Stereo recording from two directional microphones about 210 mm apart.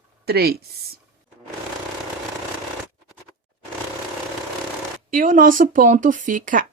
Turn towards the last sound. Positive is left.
turn(degrees=-40)  # may be behind; listen again after turning